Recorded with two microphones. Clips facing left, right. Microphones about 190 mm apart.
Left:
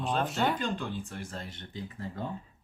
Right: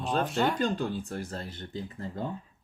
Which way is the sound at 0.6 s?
40° right (ahead or behind).